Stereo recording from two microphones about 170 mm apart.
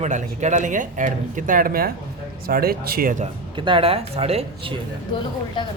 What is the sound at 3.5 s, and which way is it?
Speech, 30° right (ahead or behind).